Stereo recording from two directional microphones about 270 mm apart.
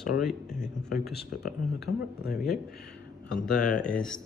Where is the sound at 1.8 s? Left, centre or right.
Left.